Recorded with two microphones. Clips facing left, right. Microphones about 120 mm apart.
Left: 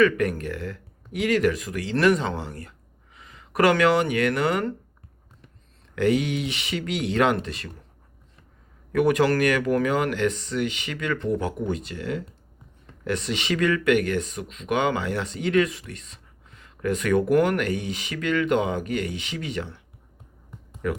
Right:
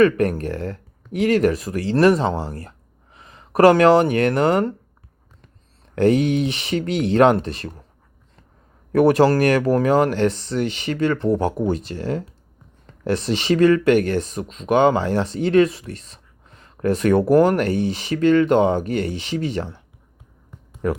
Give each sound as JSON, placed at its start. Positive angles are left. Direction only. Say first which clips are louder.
{"t": 0.0, "sound": "speech", "louder": "right 4 dB", "side_deg": -45}
{"t": 6.0, "sound": "speech", "louder": "right 6 dB", "side_deg": -45}
{"t": 8.9, "sound": "speech", "louder": "right 6 dB", "side_deg": -35}
{"t": 20.8, "sound": "speech", "louder": "right 5 dB", "side_deg": -35}